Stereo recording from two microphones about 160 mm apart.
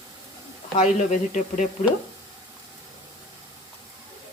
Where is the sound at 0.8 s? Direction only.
50° left (ahead or behind).